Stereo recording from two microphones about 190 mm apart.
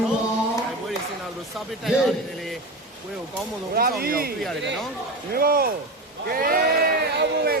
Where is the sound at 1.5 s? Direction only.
Centre (ahead or behind).